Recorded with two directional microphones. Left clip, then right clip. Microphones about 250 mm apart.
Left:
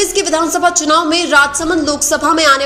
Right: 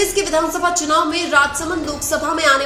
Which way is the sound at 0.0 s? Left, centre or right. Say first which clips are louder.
Left 3 dB; left.